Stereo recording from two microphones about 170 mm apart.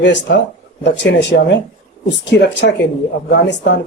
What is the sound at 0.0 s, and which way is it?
Speech, 90° left.